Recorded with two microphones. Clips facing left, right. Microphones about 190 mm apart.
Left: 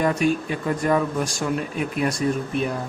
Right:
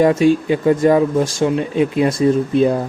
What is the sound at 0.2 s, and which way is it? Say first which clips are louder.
Speech: right 8 dB; 90° right.